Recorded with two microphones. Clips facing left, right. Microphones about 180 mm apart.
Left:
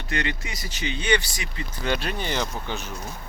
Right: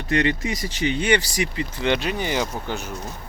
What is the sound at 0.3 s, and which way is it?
Speech, 30° right (ahead or behind).